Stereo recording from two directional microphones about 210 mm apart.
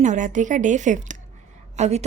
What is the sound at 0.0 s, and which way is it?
A woman's voice, 35° right (ahead or behind).